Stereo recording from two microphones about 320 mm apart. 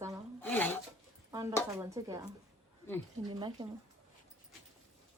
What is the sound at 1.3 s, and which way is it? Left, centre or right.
A woman's voice, centre.